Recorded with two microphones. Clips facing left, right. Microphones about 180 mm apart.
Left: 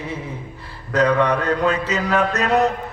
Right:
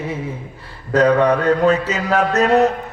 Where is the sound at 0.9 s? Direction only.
35° right (ahead or behind).